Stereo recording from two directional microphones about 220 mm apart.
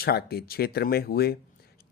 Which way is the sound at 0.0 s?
45° left (ahead or behind).